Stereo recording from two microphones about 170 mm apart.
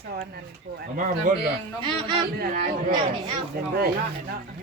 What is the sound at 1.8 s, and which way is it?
Speech, 30° right (ahead or behind).